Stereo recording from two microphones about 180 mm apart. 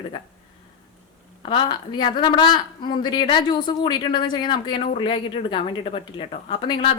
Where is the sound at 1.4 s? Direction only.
30° left (ahead or behind).